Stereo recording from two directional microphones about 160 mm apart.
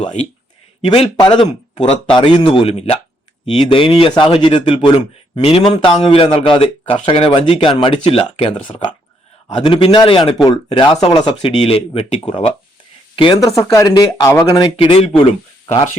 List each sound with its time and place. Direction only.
0.9 s speech: 30° left (ahead or behind)
13.6 s speech: 20° left (ahead or behind)
14.8 s speech: 35° left (ahead or behind)